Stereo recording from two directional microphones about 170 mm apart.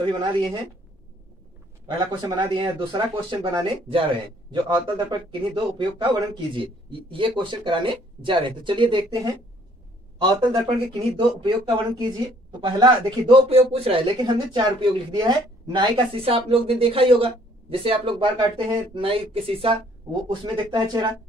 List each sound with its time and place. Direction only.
1.9 s speech: 25° right (ahead or behind)
10.5 s speech: 30° right (ahead or behind)